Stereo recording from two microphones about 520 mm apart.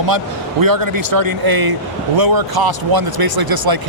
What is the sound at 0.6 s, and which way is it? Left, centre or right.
Speech, right.